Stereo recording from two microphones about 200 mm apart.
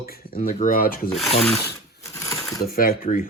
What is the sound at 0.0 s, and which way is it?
Speech, 50° left (ahead or behind).